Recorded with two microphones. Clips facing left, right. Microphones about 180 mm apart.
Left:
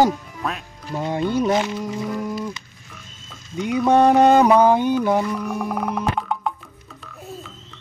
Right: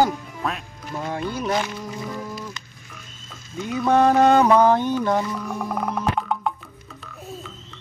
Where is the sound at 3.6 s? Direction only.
15° left (ahead or behind); by 6.5 s centre (ahead or behind).